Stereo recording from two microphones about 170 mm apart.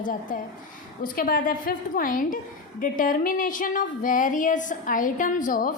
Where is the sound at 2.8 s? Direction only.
55° left (ahead or behind).